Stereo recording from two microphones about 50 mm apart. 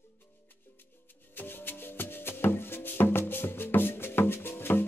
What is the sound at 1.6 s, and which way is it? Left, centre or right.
Music, left.